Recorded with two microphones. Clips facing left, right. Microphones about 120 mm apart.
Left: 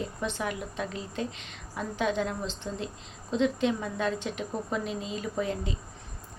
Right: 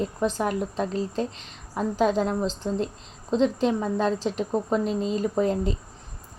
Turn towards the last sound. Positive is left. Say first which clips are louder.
# right 8 dB
turn(degrees=-40)  # may be behind; listen again after turning